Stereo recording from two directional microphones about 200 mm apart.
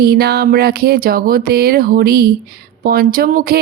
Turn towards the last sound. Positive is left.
turn(degrees=-45)  # may be behind; listen again after turning